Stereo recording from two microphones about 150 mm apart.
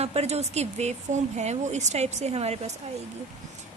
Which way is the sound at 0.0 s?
45° right (ahead or behind).